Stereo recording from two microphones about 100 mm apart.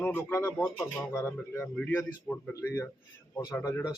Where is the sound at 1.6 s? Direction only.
15° left (ahead or behind).